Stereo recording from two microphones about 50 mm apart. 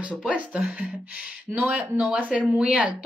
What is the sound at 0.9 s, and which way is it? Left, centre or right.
Speech, centre.